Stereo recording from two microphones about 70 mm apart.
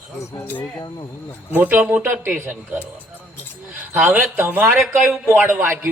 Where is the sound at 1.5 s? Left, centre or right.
Right.